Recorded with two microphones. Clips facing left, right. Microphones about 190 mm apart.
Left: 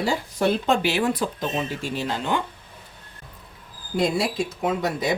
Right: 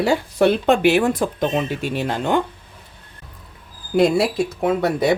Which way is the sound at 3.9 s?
60° right (ahead or behind).